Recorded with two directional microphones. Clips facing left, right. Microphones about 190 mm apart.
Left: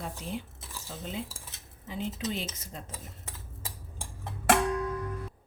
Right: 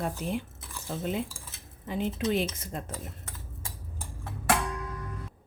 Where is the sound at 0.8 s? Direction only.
60° right (ahead or behind).